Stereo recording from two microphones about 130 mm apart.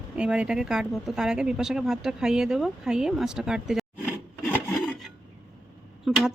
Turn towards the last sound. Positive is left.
turn(degrees=0)  # may be behind; listen again after turning